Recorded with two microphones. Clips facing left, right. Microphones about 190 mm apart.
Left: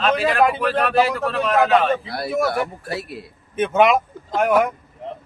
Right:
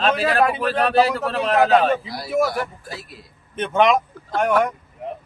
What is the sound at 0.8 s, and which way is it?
A man's voice, 30° right (ahead or behind).